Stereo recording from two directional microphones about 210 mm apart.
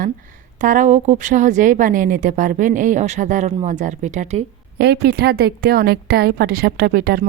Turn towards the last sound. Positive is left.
turn(degrees=-45)  # may be behind; listen again after turning